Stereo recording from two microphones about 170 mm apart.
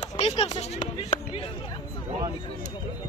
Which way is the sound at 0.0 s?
40° left (ahead or behind).